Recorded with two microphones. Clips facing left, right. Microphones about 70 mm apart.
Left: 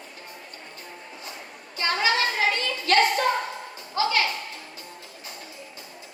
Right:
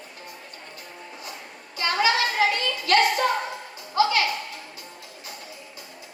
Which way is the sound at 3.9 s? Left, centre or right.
Left.